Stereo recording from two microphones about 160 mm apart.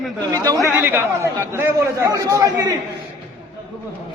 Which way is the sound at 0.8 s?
15° right (ahead or behind).